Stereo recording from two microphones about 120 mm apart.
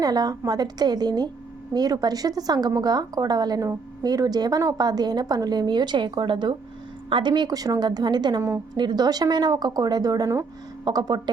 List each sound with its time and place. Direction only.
0.0 s a woman's voice: 35° right (ahead or behind)
8.4 s a woman's voice: 20° right (ahead or behind)
8.7 s a woman's voice: 35° right (ahead or behind)